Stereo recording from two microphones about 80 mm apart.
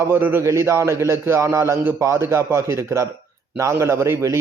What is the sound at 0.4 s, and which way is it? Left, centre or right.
Speech, right.